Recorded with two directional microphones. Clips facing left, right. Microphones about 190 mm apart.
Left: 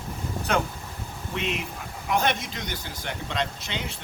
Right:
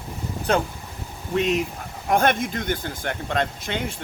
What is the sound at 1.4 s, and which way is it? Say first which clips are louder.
Speech: right 9 dB; 40° right (ahead or behind).